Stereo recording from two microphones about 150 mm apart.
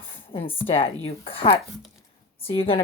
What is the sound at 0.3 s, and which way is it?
A woman's voice, 35° left (ahead or behind).